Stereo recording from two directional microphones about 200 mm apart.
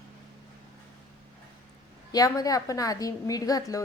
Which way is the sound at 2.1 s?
15° left (ahead or behind).